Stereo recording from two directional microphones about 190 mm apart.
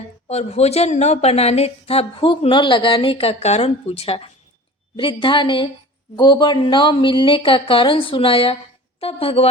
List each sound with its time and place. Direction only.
0.3 s a woman's voice: 35° left (ahead or behind)